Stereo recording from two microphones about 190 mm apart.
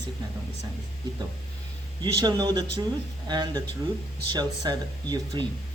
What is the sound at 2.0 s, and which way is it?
Speech, 20° right (ahead or behind).